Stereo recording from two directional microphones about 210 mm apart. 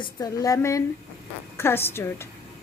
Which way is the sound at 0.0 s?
15° left (ahead or behind).